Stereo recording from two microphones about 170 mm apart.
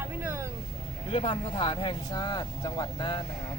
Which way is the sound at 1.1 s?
30° left (ahead or behind).